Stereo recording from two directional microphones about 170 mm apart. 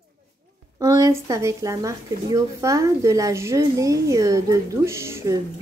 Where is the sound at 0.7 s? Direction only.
20° right (ahead or behind).